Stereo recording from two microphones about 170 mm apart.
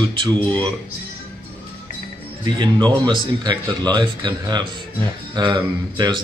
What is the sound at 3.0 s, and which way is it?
Speech, 25° right (ahead or behind).